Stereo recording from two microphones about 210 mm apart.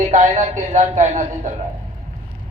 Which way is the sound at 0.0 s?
35° right (ahead or behind).